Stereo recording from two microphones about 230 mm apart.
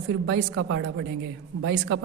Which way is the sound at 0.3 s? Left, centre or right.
Right.